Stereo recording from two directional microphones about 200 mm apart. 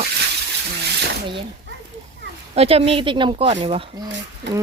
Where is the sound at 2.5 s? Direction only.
30° right (ahead or behind).